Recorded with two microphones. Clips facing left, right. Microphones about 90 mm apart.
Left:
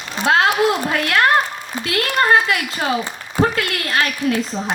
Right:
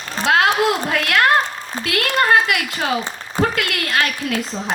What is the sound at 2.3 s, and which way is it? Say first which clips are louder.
A woman's voice: even; 30° left (ahead or behind).